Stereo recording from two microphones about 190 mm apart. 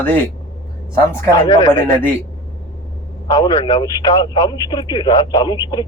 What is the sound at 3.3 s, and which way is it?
Speech, 20° left (ahead or behind).